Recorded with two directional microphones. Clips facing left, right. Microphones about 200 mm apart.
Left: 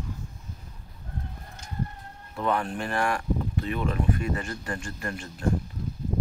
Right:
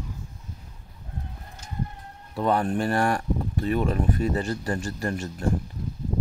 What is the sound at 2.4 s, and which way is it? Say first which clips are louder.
Speech: right 4 dB; 35° right (ahead or behind).